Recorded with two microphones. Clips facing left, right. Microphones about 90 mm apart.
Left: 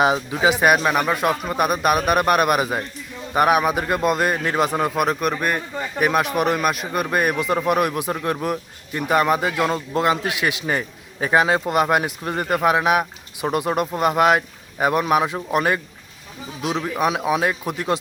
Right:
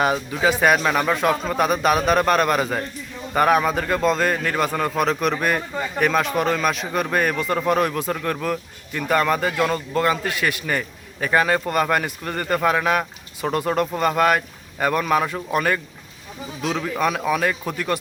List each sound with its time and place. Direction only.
0.0 s speech: 20° left (ahead or behind); by 6.1 s 5° left (ahead or behind)
6.1 s a man's voice: 15° left (ahead or behind)